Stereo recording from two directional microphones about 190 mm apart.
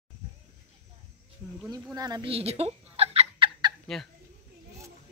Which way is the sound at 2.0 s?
20° right (ahead or behind).